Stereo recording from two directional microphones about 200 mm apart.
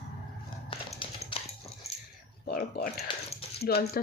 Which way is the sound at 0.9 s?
30° left (ahead or behind).